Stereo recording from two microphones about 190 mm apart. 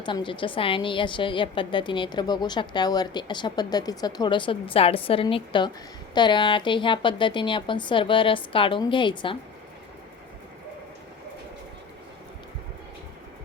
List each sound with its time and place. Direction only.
0.0 s a woman's voice: 25° left (ahead or behind)